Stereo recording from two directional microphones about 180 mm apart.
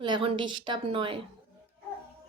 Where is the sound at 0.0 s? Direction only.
30° right (ahead or behind).